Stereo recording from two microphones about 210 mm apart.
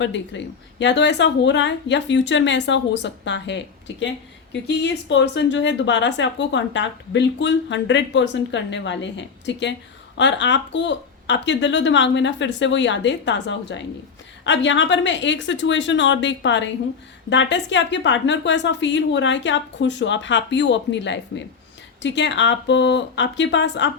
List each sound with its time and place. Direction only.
0.0 s speech: 60° left (ahead or behind)
4.6 s speech: 55° left (ahead or behind)